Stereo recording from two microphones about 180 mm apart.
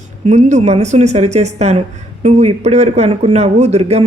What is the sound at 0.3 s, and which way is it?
A man's voice, 40° right (ahead or behind).